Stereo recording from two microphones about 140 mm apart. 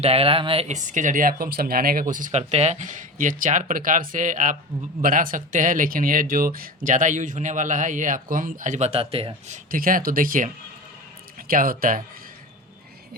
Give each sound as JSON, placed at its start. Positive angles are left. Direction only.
{"t": 0.0, "sound": "speech", "side_deg": -45}
{"t": 5.0, "sound": "speech", "side_deg": -80}
{"t": 8.9, "sound": "speech", "side_deg": -45}
{"t": 9.7, "sound": "speech", "side_deg": -90}
{"t": 11.4, "sound": "speech", "side_deg": -90}